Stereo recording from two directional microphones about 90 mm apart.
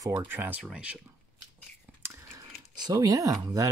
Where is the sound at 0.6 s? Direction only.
10° right (ahead or behind).